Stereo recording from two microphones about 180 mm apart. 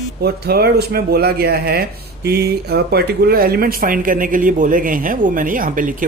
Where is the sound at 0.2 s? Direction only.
60° right (ahead or behind).